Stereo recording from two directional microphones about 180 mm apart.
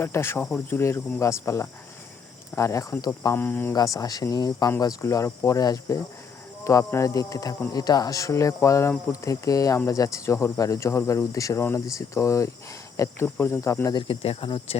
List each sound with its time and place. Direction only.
0.0 s speech: 15° left (ahead or behind); by 14.8 s 30° left (ahead or behind)